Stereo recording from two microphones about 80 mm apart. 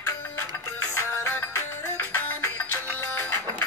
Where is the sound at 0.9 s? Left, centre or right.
Left.